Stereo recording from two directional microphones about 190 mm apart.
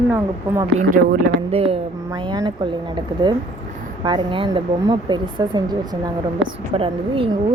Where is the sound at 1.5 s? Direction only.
30° right (ahead or behind).